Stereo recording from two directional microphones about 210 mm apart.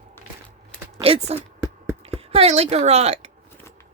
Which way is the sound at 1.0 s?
25° right (ahead or behind).